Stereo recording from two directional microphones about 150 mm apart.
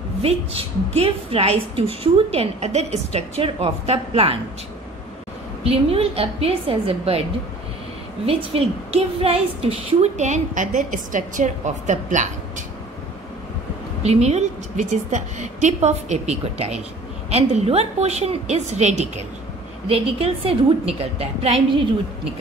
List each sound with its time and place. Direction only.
0.2 s a woman's voice: 40° right (ahead or behind)
5.6 s a woman's voice: 40° right (ahead or behind)
8.3 s a woman's voice: 40° right (ahead or behind)
14.0 s a woman's voice: 45° right (ahead or behind)